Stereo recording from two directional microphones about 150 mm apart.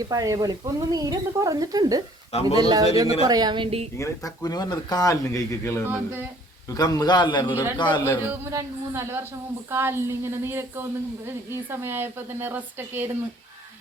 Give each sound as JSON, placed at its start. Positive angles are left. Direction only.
{"t": 0.0, "sound": "speech", "side_deg": -25}
{"t": 2.3, "sound": "speech", "side_deg": 40}
{"t": 2.6, "sound": "a woman's voice", "side_deg": -25}
{"t": 3.9, "sound": "speech", "side_deg": 20}
{"t": 7.5, "sound": "speech", "side_deg": -15}
{"t": 7.8, "sound": "speech", "side_deg": 30}
{"t": 8.2, "sound": "speech", "side_deg": -15}